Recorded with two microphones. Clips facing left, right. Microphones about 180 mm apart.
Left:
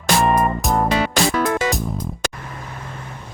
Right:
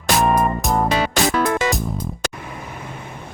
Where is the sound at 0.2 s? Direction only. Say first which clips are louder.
Right 1 dB; centre (ahead or behind).